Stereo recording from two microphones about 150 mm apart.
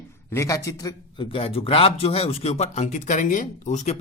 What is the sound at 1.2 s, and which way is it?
Speech, 40° left (ahead or behind).